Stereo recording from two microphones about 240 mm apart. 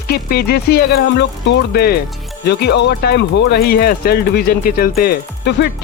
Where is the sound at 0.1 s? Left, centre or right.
Left.